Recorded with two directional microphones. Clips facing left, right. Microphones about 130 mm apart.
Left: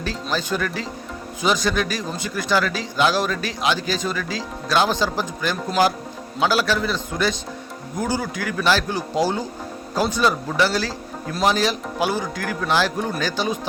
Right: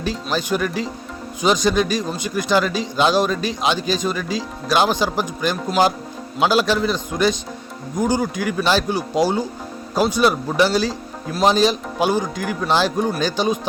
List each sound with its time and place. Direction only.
0.0 s speech: 15° right (ahead or behind)